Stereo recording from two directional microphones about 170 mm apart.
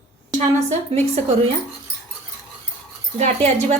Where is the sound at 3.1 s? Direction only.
40° right (ahead or behind).